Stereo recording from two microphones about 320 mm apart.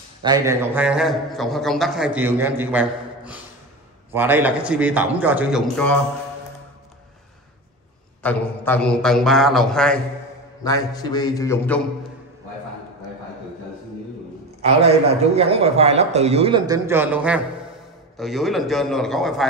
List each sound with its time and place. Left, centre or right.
0.2 s a man's voice: centre
8.2 s a man's voice: centre
10.6 s a sound: centre
14.6 s a man's voice: centre